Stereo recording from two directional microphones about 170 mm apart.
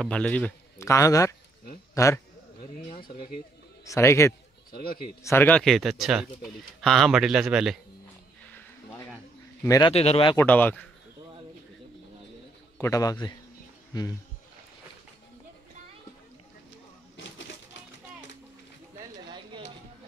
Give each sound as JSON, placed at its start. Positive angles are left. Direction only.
{"t": 0.0, "sound": "a man's voice", "side_deg": 5}
{"t": 3.8, "sound": "a man's voice", "side_deg": 15}
{"t": 8.5, "sound": "a sound", "side_deg": 15}
{"t": 9.6, "sound": "a man's voice", "side_deg": 20}
{"t": 9.9, "sound": "speech", "side_deg": 35}
{"t": 10.3, "sound": "a man's voice", "side_deg": 10}
{"t": 12.7, "sound": "a man's voice", "side_deg": 20}